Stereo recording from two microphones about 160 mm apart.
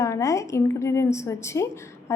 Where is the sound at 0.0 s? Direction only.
20° left (ahead or behind).